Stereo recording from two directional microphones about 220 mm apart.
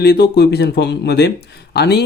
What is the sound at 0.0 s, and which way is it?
Speech, 45° left (ahead or behind).